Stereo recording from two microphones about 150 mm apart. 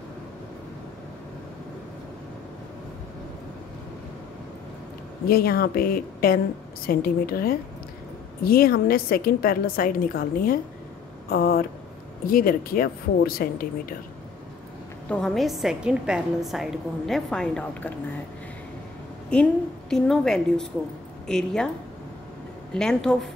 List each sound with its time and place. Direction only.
5.2 s a woman's voice: 90° left
11.2 s a sound: 90° left
12.3 s a woman's voice: 70° left (ahead or behind)
15.0 s a woman's voice: 5° left (ahead or behind)
19.3 s a woman's voice: 5° left (ahead or behind)
22.8 s a woman's voice: 5° left (ahead or behind)